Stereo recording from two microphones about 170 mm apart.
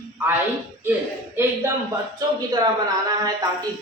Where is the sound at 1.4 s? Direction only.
10° right (ahead or behind).